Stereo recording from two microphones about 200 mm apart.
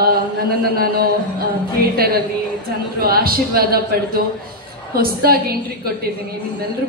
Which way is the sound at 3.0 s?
50° right (ahead or behind).